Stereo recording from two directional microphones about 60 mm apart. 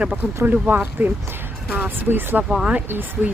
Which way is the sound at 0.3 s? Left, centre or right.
Right.